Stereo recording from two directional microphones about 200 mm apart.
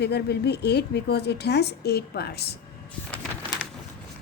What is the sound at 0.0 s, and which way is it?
A woman's voice, 55° left (ahead or behind).